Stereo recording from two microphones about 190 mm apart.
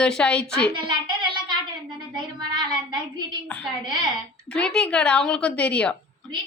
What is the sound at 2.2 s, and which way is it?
Child singing, 25° right (ahead or behind).